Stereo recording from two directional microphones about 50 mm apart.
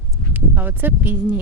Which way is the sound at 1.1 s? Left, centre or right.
Right.